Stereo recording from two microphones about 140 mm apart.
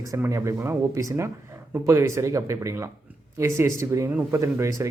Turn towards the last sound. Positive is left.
turn(degrees=-20)  # may be behind; listen again after turning